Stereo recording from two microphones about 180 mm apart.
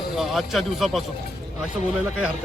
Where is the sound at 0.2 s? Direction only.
Centre (ahead or behind).